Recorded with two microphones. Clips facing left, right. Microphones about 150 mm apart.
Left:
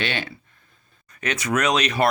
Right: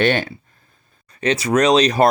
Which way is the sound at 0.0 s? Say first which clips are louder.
Right 10 dB; 45° right (ahead or behind).